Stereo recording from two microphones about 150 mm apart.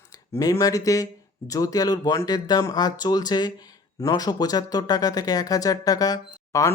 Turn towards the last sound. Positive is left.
turn(degrees=20)  # may be behind; listen again after turning